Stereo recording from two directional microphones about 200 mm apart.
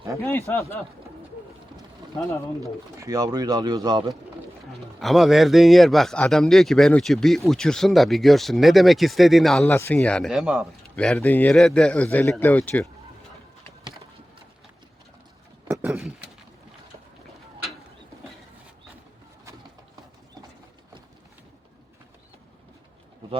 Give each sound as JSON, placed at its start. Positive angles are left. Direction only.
{"t": 0.2, "sound": "speech", "side_deg": 15}
{"t": 3.0, "sound": "speech", "side_deg": -15}
{"t": 4.9, "sound": "a man's voice", "side_deg": 0}
{"t": 15.6, "sound": "a sound", "side_deg": -10}